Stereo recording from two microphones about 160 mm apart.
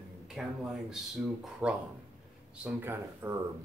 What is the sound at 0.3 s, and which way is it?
Speech, 5° right (ahead or behind).